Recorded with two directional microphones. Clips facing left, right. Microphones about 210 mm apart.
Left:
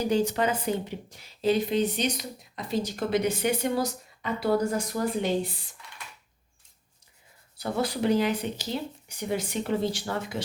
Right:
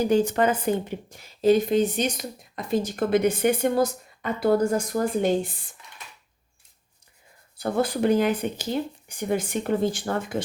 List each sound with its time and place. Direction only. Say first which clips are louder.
0.1 s a woman's voice: right 4 dB; 50° right (ahead or behind)
7.6 s a woman's voice: right 4 dB; 50° right (ahead or behind)